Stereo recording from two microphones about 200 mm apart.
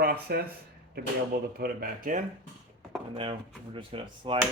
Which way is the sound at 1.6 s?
45° right (ahead or behind).